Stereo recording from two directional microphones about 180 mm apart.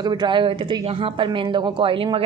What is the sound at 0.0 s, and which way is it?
A woman's voice, 25° right (ahead or behind).